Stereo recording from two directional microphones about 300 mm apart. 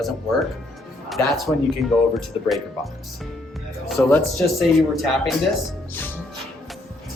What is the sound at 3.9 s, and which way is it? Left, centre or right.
Speech, centre.